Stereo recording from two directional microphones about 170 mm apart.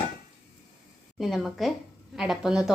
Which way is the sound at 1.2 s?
Centre (ahead or behind).